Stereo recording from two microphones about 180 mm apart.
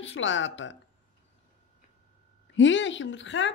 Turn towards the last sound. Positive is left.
turn(degrees=90)